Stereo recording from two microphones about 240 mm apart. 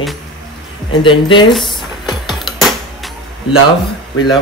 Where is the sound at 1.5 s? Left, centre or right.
Centre.